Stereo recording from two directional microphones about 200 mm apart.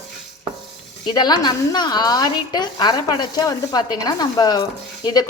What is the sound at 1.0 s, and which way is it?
A woman's voice, 20° left (ahead or behind).